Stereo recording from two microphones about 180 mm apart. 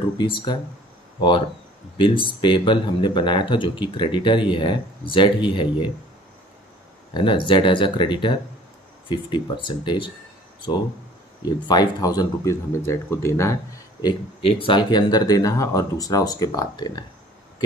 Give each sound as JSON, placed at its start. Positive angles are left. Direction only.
{"t": 0.2, "sound": "speech", "side_deg": 25}
{"t": 2.0, "sound": "speech", "side_deg": 30}
{"t": 7.2, "sound": "speech", "side_deg": 25}
{"t": 11.4, "sound": "speech", "side_deg": 25}
{"t": 14.4, "sound": "speech", "side_deg": 30}